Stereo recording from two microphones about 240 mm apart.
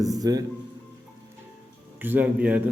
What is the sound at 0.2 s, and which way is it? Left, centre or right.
Speech, centre.